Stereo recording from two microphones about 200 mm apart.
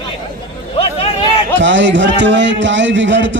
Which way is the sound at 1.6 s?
65° right (ahead or behind).